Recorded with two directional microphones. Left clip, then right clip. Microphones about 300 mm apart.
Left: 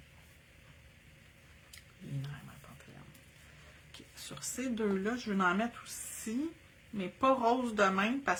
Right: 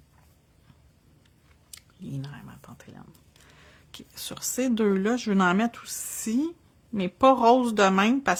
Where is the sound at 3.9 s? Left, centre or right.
Right.